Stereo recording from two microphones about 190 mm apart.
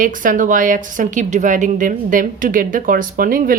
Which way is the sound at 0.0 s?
45° right (ahead or behind).